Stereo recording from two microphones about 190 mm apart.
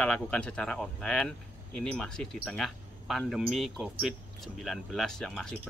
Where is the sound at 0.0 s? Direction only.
5° left (ahead or behind).